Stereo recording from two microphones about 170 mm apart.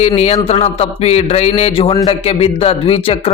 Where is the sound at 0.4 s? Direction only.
35° left (ahead or behind).